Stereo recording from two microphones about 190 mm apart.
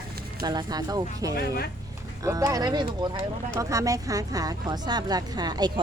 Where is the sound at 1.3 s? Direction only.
55° left (ahead or behind).